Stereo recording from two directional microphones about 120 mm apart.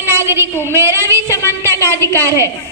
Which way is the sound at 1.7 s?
20° left (ahead or behind).